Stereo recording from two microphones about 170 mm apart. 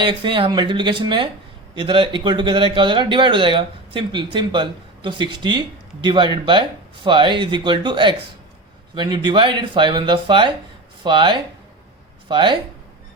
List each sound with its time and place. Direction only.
0.0 s speech: 30° right (ahead or behind)